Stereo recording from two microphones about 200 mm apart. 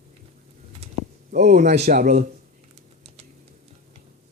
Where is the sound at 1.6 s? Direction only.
35° right (ahead or behind).